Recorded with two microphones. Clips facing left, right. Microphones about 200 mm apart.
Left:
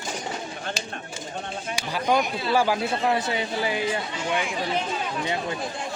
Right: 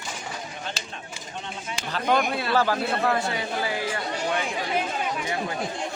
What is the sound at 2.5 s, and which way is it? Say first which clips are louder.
Speech: left 2 dB; 10° left (ahead or behind).